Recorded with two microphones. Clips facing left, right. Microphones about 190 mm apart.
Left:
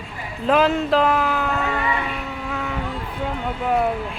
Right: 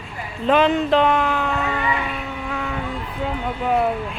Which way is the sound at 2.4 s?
Centre (ahead or behind).